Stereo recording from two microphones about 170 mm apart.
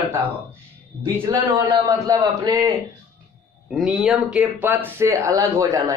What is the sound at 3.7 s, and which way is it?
Speech, 5° right (ahead or behind).